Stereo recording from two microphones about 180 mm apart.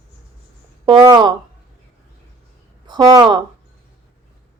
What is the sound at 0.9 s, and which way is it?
Speech, 25° right (ahead or behind).